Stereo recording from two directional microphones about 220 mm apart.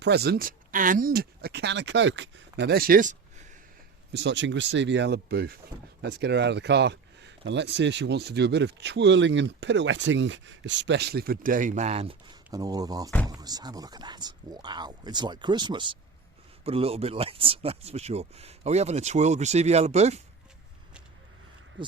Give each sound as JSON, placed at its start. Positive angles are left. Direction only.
{"t": 0.0, "sound": "speech", "side_deg": -50}
{"t": 4.1, "sound": "speech", "side_deg": -55}